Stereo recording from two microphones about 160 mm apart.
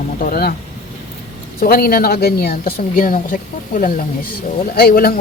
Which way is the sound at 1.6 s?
70° left (ahead or behind).